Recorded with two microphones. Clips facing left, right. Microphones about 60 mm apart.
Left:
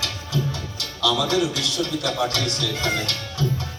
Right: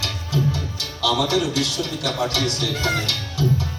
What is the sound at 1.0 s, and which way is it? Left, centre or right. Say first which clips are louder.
A man's voice: right 1 dB; right.